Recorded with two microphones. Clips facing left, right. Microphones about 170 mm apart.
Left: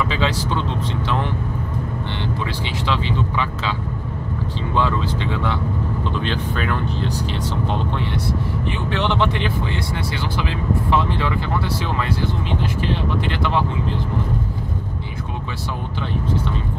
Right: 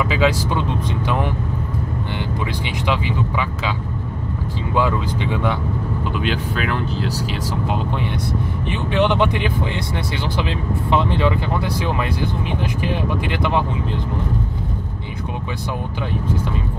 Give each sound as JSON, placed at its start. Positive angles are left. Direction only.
{"t": 0.1, "sound": "speech", "side_deg": -10}
{"t": 2.9, "sound": "speech", "side_deg": -10}
{"t": 4.7, "sound": "speech", "side_deg": -15}
{"t": 10.9, "sound": "speech", "side_deg": -20}